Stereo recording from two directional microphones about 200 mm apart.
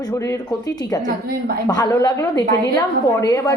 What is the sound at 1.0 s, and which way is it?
Speech, 50° right (ahead or behind).